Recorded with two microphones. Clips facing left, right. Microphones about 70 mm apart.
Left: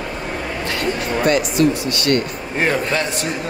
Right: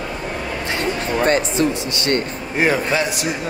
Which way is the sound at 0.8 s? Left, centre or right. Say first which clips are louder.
Even; right.